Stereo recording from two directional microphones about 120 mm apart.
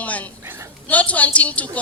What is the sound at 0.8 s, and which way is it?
Speech, 10° left (ahead or behind).